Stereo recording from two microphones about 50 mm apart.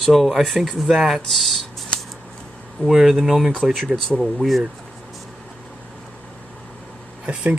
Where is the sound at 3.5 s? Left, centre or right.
Centre.